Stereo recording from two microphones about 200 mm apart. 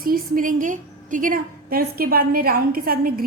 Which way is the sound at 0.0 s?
45° right (ahead or behind).